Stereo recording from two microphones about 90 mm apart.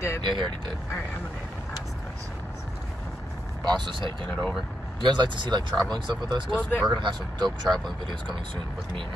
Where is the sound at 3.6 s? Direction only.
55° right (ahead or behind).